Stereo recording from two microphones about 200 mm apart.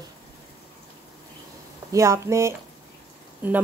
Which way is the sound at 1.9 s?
15° right (ahead or behind).